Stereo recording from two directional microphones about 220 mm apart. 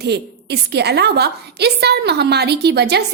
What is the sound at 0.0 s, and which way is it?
A woman's voice, 50° right (ahead or behind).